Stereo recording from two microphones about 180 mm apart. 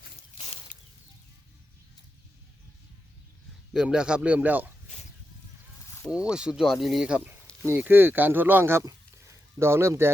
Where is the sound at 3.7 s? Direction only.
5° right (ahead or behind).